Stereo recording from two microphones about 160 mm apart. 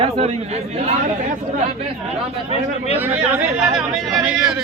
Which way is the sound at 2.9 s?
10° right (ahead or behind).